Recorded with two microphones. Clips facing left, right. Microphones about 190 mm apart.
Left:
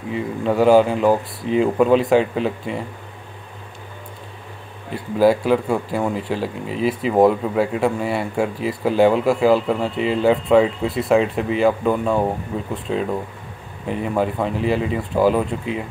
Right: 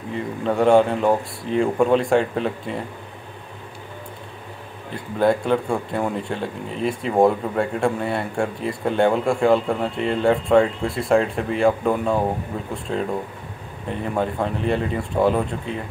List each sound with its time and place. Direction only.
0.1 s speech: 5° left (ahead or behind)
5.2 s speech: 5° left (ahead or behind)